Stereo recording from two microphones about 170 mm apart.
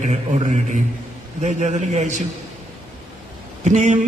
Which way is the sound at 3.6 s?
45° right (ahead or behind).